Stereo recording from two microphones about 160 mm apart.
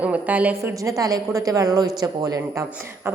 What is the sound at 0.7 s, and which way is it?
Speech, 20° right (ahead or behind).